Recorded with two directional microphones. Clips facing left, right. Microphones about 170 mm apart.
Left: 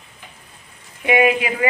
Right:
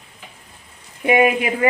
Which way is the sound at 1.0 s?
35° right (ahead or behind).